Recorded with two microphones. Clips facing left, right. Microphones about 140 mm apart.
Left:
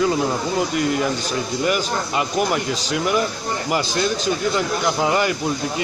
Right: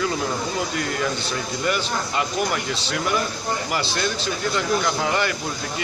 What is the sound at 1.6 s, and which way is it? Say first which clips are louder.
Speech: left 2 dB; 15° left (ahead or behind).